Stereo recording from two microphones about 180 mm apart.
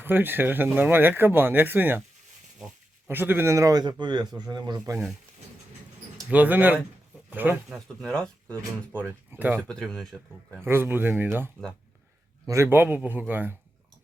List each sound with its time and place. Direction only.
0.0 s speech: 10° right (ahead or behind)
3.1 s a man's voice: 10° right (ahead or behind)
6.1 s speech: 5° right (ahead or behind)
8.0 s speech: 5° left (ahead or behind)
9.3 s speech: 10° right (ahead or behind)
9.6 s speech: 5° left (ahead or behind)
10.6 s speech: 15° right (ahead or behind)